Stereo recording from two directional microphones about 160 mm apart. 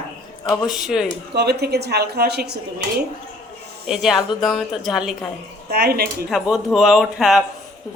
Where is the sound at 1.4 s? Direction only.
90° right.